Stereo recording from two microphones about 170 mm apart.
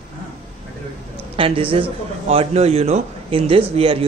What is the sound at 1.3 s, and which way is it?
A man's voice, 30° right (ahead or behind).